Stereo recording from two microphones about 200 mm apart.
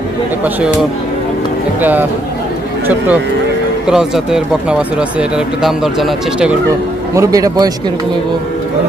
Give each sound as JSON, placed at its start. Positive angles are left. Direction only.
{"t": 1.8, "sound": "a man's voice", "side_deg": -10}
{"t": 7.1, "sound": "a man's voice", "side_deg": -15}